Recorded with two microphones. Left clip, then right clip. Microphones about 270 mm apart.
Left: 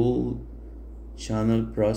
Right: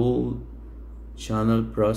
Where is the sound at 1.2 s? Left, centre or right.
Centre.